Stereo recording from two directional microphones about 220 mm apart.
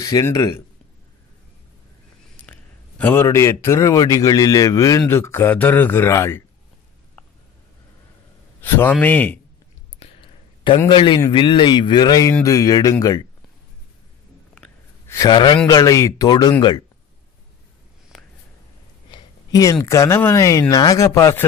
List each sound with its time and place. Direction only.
0.0 s speech: 15° left (ahead or behind)
3.0 s speech: 10° left (ahead or behind)
8.5 s speech: 10° left (ahead or behind)
9.9 s a sound: 25° left (ahead or behind)
10.9 s speech: 20° left (ahead or behind)
14.5 s a sound: 5° left (ahead or behind)
15.1 s speech: 20° left (ahead or behind)
19.0 s speech: 20° left (ahead or behind)